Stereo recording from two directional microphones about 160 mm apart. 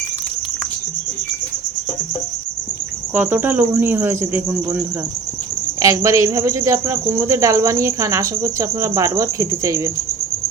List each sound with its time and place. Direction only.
3.2 s speech: 10° right (ahead or behind)
5.8 s speech: 20° right (ahead or behind)